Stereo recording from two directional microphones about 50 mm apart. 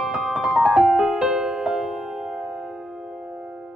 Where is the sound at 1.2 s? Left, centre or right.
Centre.